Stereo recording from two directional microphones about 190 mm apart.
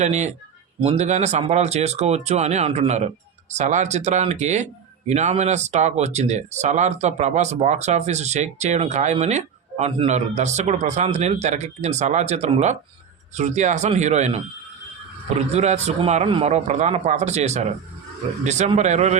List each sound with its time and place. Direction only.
0.0 s speech: 40° right (ahead or behind)
15.5 s speech: 35° right (ahead or behind)